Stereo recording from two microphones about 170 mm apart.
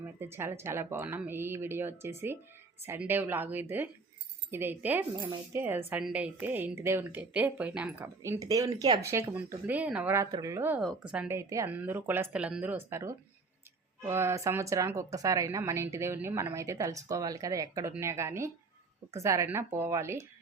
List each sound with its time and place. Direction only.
0.2 s speech: 15° right (ahead or behind)
10.8 s speech: 5° right (ahead or behind)